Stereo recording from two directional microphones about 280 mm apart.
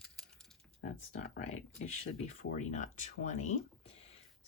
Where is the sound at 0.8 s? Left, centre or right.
Left.